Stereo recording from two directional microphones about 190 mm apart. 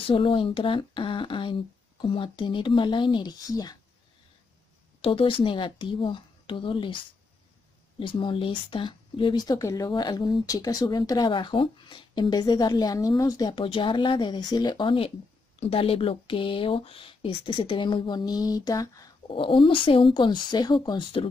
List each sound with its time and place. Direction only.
0.0 s speech: 30° left (ahead or behind)
5.0 s speech: 30° left (ahead or behind)
8.0 s speech: 25° left (ahead or behind)